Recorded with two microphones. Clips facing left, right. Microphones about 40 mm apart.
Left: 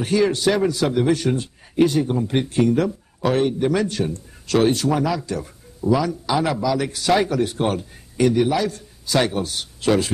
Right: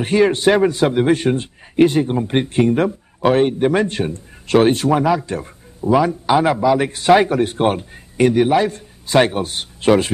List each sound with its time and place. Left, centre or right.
0.0 s a man's voice: right